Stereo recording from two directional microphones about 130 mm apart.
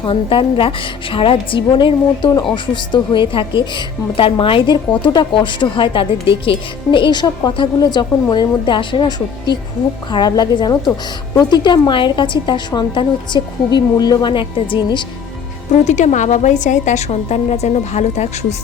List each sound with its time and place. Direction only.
0.0 s a woman's voice: 40° left (ahead or behind)
15.8 s a woman's voice: 65° left (ahead or behind)